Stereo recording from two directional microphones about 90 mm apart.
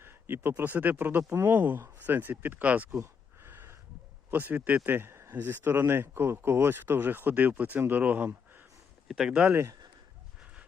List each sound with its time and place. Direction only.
0.0 s speech: 25° right (ahead or behind)
3.0 s a sound: 25° right (ahead or behind)
4.3 s speech: 20° right (ahead or behind)
9.0 s speech: 5° right (ahead or behind)
9.5 s speech: 25° right (ahead or behind)
10.4 s dog: 15° right (ahead or behind)